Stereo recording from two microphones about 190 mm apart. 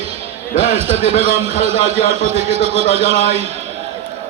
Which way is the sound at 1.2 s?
35° right (ahead or behind).